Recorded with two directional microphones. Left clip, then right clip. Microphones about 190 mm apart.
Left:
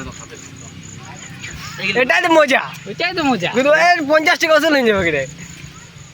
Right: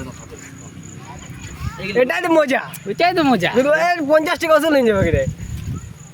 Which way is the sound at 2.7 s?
55° right (ahead or behind).